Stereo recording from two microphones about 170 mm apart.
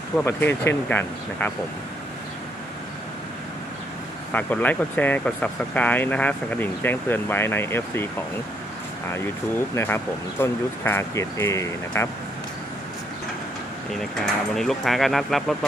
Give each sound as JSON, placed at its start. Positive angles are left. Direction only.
{"t": 0.2, "sound": "speech", "side_deg": 10}
{"t": 4.3, "sound": "speech", "side_deg": 10}
{"t": 9.7, "sound": "speech", "side_deg": 10}
{"t": 14.5, "sound": "speech", "side_deg": 0}